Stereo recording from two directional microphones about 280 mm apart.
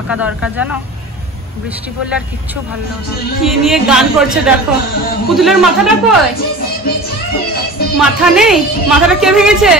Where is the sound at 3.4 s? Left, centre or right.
Centre.